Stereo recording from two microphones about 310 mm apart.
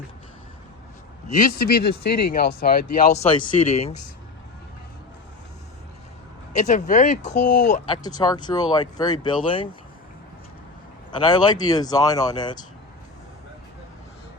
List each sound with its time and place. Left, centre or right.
1.5 s speech: left
6.6 s speech: left
8.0 s speech: centre
11.2 s speech: centre